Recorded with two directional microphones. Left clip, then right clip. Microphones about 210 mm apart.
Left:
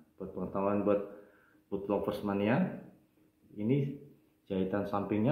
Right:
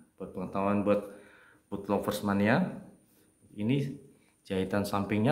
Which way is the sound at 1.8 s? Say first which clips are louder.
Right 3 dB; 20° right (ahead or behind).